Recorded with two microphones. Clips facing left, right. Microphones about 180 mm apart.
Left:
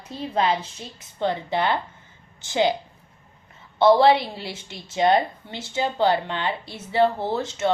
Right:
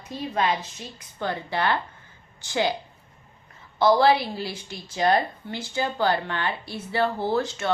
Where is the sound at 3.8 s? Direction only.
25° left (ahead or behind).